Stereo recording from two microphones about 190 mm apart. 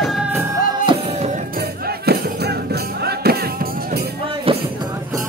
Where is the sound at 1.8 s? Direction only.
55° right (ahead or behind).